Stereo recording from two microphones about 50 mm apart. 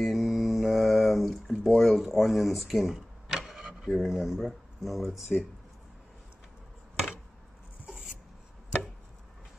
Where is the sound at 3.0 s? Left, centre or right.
Centre.